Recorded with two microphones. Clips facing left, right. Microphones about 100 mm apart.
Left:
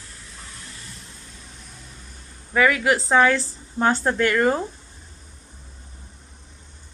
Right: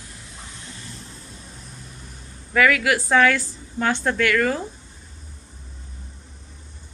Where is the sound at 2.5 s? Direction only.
25° left (ahead or behind).